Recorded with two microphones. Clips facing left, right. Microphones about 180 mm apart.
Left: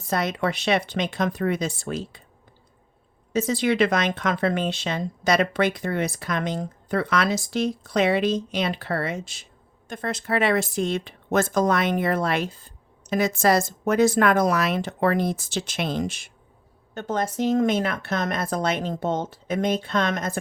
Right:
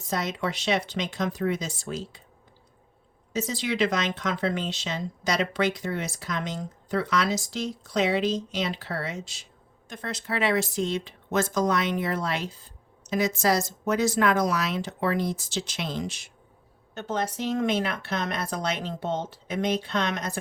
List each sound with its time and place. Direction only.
0.1 s speech: 60° left (ahead or behind)
3.3 s speech: 55° left (ahead or behind)